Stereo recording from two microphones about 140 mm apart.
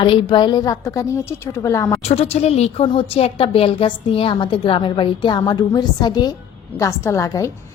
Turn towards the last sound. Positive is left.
turn(degrees=25)  # may be behind; listen again after turning